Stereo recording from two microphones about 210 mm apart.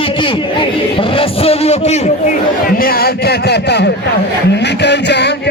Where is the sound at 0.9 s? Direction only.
25° left (ahead or behind).